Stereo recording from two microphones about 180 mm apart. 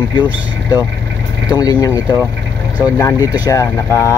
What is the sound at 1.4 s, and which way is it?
Speech, 20° left (ahead or behind).